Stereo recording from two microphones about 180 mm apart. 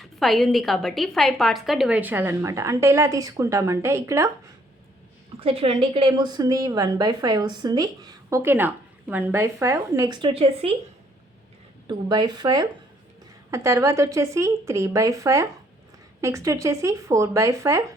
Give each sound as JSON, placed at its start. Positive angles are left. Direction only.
{"t": 0.0, "sound": "a woman's voice", "side_deg": 0}
{"t": 5.4, "sound": "a woman's voice", "side_deg": -30}
{"t": 11.9, "sound": "a woman's voice", "side_deg": -25}